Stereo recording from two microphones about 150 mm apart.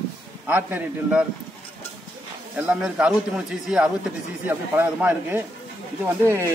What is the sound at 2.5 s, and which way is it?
A man's voice, 5° right (ahead or behind).